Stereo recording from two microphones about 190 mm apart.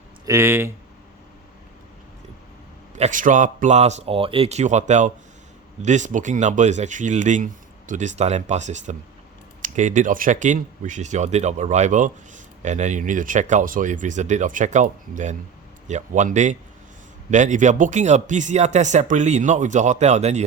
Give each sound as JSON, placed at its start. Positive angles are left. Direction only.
{"t": 0.3, "sound": "speech", "side_deg": -15}
{"t": 2.9, "sound": "speech", "side_deg": -40}